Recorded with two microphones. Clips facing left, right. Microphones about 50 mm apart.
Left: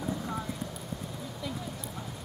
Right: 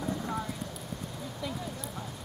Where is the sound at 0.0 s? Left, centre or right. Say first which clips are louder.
Right 1 dB; centre.